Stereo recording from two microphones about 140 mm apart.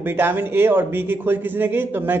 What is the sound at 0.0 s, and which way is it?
Speech, 15° right (ahead or behind).